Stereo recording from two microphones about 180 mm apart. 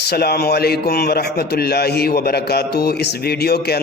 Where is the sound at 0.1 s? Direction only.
60° left (ahead or behind).